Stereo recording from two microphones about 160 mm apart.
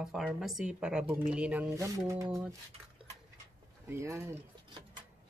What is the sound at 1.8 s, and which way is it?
Speech, 20° right (ahead or behind).